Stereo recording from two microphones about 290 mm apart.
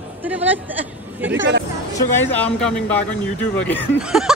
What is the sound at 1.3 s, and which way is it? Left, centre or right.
Speech, right.